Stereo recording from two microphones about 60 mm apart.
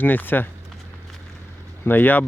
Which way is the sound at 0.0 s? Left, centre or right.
Left.